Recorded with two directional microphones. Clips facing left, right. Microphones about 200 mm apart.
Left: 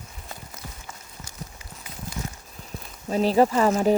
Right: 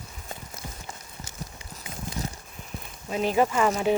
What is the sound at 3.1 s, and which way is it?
Speech, 35° left (ahead or behind).